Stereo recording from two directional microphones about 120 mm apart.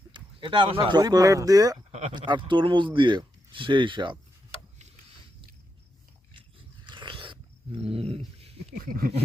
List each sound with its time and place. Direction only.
0.1 s speech: 40° right (ahead or behind)
0.9 s speech: 35° right (ahead or behind)
2.1 s speech: 40° right (ahead or behind)
6.8 s dog: 40° right (ahead or behind)